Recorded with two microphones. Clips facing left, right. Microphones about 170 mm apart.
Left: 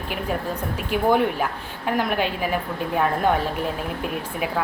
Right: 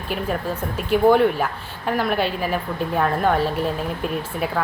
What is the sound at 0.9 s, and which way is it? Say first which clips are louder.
A woman's voice: right 5 dB; 10° left (ahead or behind).